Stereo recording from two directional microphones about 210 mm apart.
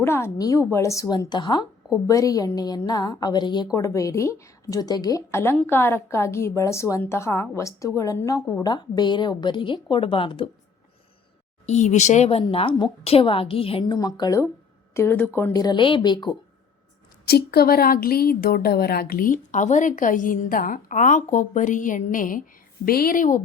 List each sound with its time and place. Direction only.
0.0 s a woman's voice: 10° left (ahead or behind)
11.6 s a woman's voice: 35° left (ahead or behind)
17.2 s a woman's voice: 50° left (ahead or behind)